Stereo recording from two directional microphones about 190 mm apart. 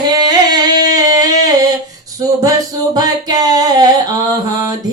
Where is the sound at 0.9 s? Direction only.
20° right (ahead or behind).